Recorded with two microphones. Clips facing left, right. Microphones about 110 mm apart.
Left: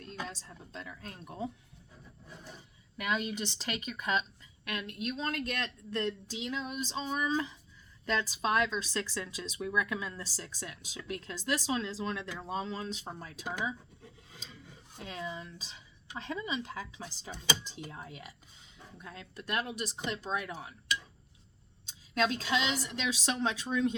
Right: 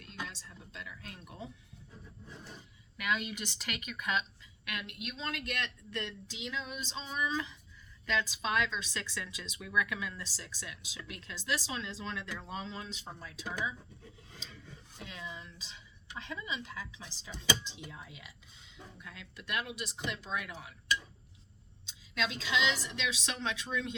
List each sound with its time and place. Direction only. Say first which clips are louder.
0.0 s speech: left 3 dB; 40° left (ahead or behind)
3.0 s speech: left 2 dB; 35° left (ahead or behind)
15.0 s speech: left 5 dB; 40° left (ahead or behind)
21.8 s speech: left 6 dB; 45° left (ahead or behind)